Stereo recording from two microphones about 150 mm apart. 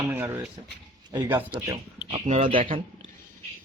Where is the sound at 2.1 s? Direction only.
45° right (ahead or behind).